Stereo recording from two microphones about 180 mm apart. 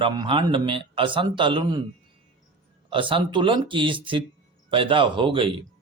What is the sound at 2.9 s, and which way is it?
Speech, 30° right (ahead or behind).